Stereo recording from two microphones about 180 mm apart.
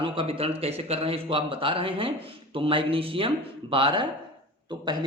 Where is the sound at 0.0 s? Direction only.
30° right (ahead or behind).